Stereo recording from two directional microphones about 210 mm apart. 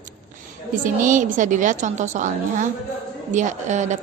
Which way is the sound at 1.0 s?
40° right (ahead or behind).